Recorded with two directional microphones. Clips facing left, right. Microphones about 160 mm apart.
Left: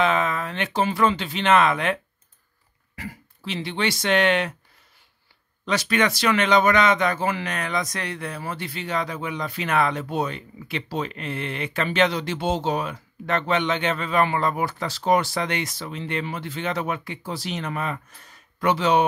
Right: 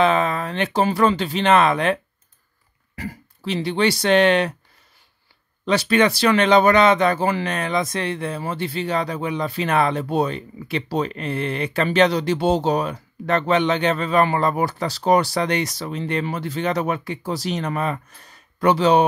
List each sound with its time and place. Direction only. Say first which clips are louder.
0.0 s speech: right 4 dB; 35° right (ahead or behind)
3.0 s speech: right 5 dB; 40° right (ahead or behind)
5.7 s speech: right 5 dB; 30° right (ahead or behind)